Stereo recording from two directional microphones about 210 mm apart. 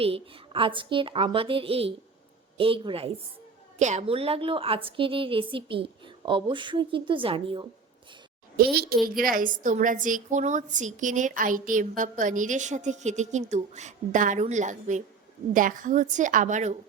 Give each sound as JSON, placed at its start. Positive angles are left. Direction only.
{"t": 0.0, "sound": "a woman's voice", "side_deg": -25}
{"t": 8.5, "sound": "a child's voice", "side_deg": -45}